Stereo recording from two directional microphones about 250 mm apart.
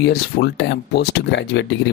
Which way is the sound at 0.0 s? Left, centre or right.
Left.